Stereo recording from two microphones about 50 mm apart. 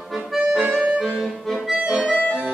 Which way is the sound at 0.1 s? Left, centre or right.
Centre.